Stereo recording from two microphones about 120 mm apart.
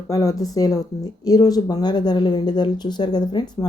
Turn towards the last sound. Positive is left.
turn(degrees=35)  # may be behind; listen again after turning